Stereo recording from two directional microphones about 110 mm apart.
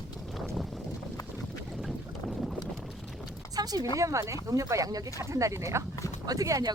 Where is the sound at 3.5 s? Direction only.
35° right (ahead or behind).